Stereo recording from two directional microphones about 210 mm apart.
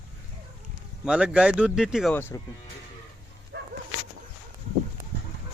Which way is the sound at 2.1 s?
10° left (ahead or behind).